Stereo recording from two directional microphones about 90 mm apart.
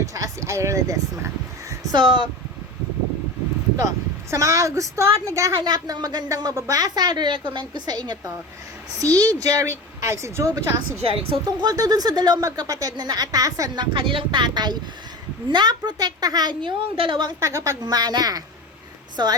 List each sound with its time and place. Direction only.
0.0 s speech: 40° right (ahead or behind)
2.0 s a woman's voice: 65° right (ahead or behind)
4.3 s speech: 35° right (ahead or behind)
5.6 s a woman's voice: 45° right (ahead or behind)
11.0 s a woman's voice: 90° right
11.4 s a woman's voice: 45° right (ahead or behind)
13.7 s a woman's voice: 70° right (ahead or behind)
17.4 s speech: 35° right (ahead or behind)
17.8 s a woman's voice: 45° right (ahead or behind)